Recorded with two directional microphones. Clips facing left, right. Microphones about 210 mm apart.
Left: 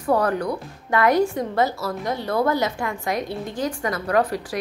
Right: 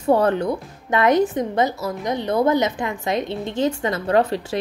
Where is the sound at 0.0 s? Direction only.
25° right (ahead or behind).